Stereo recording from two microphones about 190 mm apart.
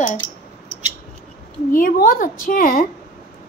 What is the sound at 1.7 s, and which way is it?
A woman's voice, 50° left (ahead or behind).